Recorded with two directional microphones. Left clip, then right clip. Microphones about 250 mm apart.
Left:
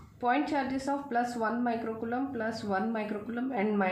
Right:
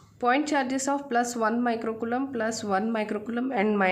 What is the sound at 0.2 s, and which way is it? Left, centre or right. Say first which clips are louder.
A woman's voice: right 5 dB; right.